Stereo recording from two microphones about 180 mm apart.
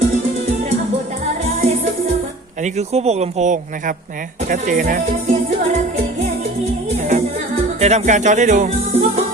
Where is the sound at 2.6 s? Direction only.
40° right (ahead or behind).